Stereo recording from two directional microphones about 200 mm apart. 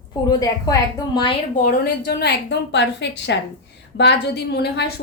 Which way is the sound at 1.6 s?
55° left (ahead or behind).